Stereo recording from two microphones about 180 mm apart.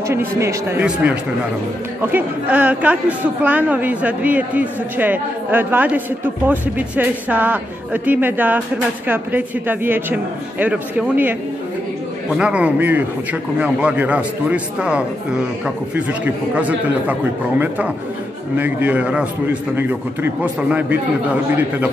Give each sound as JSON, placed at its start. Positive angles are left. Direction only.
{"t": 0.1, "sound": "speech", "side_deg": -15}